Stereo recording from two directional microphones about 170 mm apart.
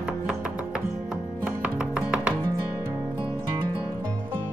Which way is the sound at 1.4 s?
5° right (ahead or behind).